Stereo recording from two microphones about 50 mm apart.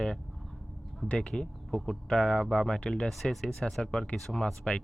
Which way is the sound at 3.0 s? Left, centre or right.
Centre.